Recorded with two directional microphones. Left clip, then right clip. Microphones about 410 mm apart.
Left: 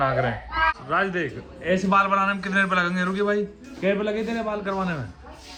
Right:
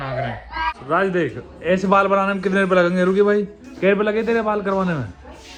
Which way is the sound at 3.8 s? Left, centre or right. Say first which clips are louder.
Right 6 dB; centre.